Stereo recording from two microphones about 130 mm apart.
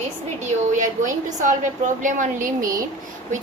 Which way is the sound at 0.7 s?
75° right (ahead or behind).